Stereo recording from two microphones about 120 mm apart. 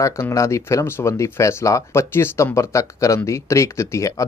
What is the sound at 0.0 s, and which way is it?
Speech, 25° left (ahead or behind).